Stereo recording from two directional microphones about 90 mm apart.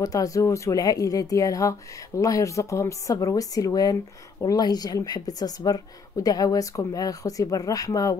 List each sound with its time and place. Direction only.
0.0 s speech: 40° left (ahead or behind)